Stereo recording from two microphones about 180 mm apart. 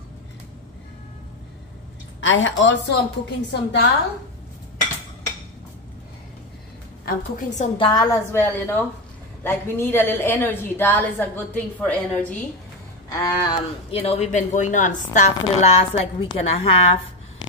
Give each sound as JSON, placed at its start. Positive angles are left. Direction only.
{"t": 2.1, "sound": "a woman's voice", "side_deg": 90}
{"t": 7.1, "sound": "speech", "side_deg": 40}
{"t": 7.7, "sound": "a woman's voice", "side_deg": 25}
{"t": 13.2, "sound": "speech", "side_deg": 25}